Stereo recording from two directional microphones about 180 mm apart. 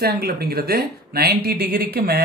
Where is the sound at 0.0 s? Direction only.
60° right (ahead or behind).